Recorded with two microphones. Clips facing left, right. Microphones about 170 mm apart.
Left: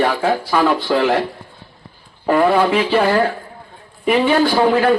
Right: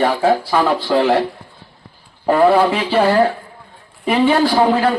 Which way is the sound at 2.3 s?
30° right (ahead or behind).